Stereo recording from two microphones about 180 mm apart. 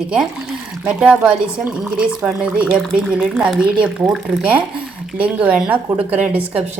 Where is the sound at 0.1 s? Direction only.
5° right (ahead or behind).